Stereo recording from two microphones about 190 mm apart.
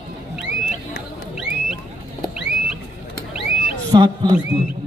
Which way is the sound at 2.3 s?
5° right (ahead or behind).